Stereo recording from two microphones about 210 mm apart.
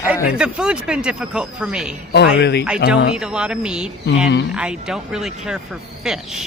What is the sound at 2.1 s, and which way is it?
Speech, 55° left (ahead or behind).